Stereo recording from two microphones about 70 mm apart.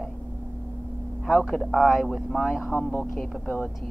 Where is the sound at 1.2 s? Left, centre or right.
Centre.